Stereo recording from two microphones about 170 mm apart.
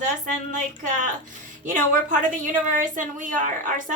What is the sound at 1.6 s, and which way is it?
A woman's voice, 50° right (ahead or behind).